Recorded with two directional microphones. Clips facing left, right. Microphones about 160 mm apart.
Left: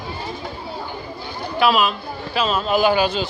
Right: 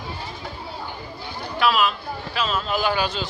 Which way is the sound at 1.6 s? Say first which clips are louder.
Left 3 dB; 20° left (ahead or behind).